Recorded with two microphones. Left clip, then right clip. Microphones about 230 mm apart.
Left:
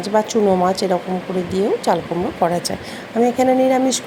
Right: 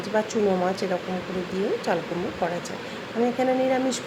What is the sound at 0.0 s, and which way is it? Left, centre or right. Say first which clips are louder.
A woman's voice: left 7 dB; centre.